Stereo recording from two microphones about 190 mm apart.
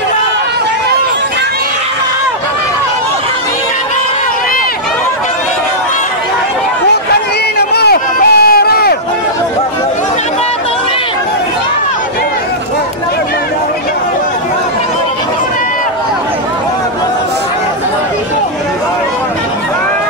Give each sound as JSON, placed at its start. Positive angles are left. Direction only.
{"t": 7.5, "sound": "run", "side_deg": 55}